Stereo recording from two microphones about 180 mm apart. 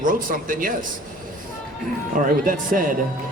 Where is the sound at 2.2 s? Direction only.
50° right (ahead or behind).